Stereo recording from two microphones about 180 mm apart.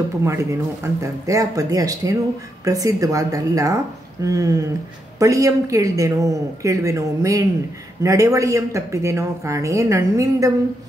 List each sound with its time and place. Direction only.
0.2 s speech: 15° right (ahead or behind)